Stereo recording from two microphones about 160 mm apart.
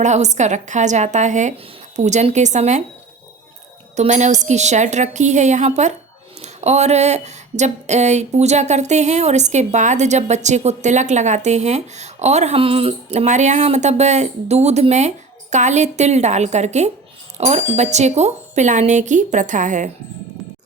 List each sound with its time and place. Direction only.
0.0 s speech: 45° right (ahead or behind)
3.9 s speech: 45° right (ahead or behind)